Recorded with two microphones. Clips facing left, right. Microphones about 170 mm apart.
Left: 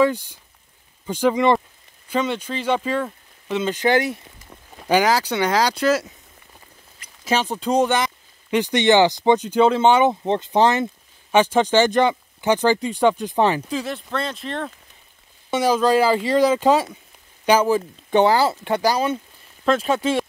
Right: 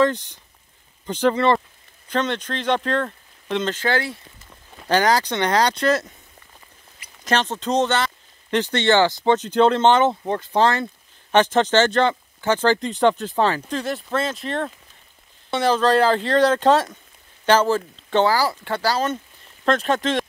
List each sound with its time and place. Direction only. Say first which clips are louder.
0.0 s speech: left 1 dB; 10° left (ahead or behind)
7.2 s speech: left 1 dB; 10° left (ahead or behind)
10.2 s speech: left 2 dB; 20° left (ahead or behind)
13.7 s speech: right 2 dB; centre (ahead or behind)
15.5 s speech: left 1 dB; 10° left (ahead or behind)